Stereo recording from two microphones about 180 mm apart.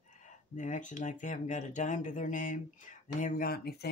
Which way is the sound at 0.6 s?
45° left (ahead or behind).